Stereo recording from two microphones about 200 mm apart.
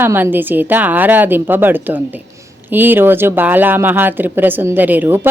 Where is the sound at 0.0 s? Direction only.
10° right (ahead or behind).